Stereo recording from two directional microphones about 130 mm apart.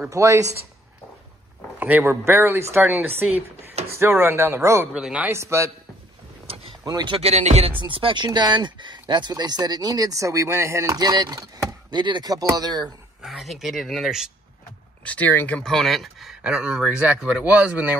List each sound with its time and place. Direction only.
0.1 s speech: 25° right (ahead or behind)
1.8 s speech: 15° right (ahead or behind)
4.9 s speech: 10° right (ahead or behind)
5.3 s speech: 20° right (ahead or behind)
6.4 s boat: 45° right (ahead or behind)
6.8 s speech: 30° right (ahead or behind)
7.2 s speech: 55° right (ahead or behind); by 12.9 s 30° right (ahead or behind)
13.2 s speech: centre (ahead or behind)
15.0 s speech: 15° left (ahead or behind); by 17.9 s 10° right (ahead or behind)